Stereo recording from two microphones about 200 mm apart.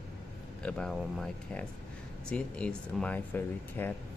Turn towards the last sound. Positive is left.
turn(degrees=10)  # may be behind; listen again after turning